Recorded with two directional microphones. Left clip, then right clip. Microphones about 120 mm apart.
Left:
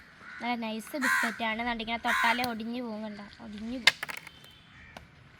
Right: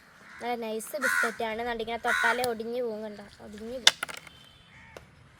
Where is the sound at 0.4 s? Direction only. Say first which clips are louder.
Right 2 dB; 40° right (ahead or behind).